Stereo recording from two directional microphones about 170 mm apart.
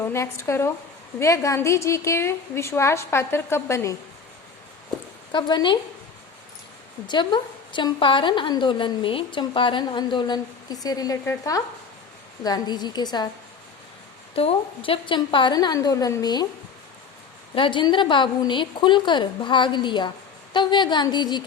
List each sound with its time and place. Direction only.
0.0 s a woman's voice: 15° left (ahead or behind)
5.3 s a woman's voice: 25° left (ahead or behind)
7.1 s a woman's voice: 25° left (ahead or behind)
14.3 s a woman's voice: 35° left (ahead or behind)
17.5 s a woman's voice: 30° left (ahead or behind)